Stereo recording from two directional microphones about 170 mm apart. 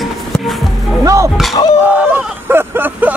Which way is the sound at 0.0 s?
Centre (ahead or behind).